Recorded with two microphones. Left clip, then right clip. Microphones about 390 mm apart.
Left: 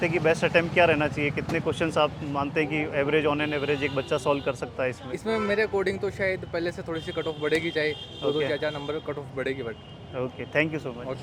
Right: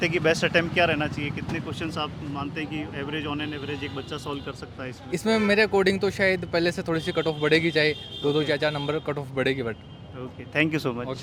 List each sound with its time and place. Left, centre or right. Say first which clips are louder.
0.0 s speech: right 1 dB; centre
5.1 s speech: right 6 dB; right
10.7 s speech: right 5 dB; centre